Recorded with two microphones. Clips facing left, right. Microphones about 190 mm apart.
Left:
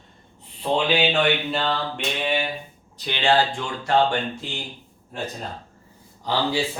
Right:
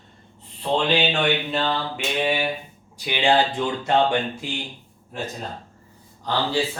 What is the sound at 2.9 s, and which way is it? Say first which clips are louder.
Speech: right 1 dB; 10° right (ahead or behind).